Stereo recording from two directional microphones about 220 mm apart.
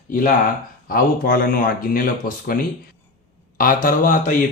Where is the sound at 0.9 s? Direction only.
40° left (ahead or behind).